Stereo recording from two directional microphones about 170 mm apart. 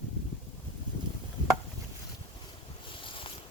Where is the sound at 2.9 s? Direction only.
30° left (ahead or behind).